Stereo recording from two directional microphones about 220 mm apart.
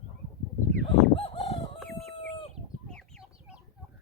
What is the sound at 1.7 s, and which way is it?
Chicken, centre (ahead or behind).